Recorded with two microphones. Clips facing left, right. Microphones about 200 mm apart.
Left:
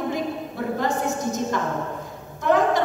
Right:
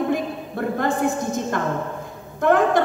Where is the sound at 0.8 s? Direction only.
55° right (ahead or behind).